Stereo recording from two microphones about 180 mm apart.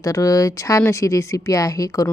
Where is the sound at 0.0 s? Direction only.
20° left (ahead or behind).